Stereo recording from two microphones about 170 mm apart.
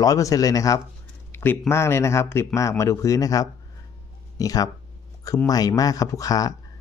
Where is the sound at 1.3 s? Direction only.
10° left (ahead or behind).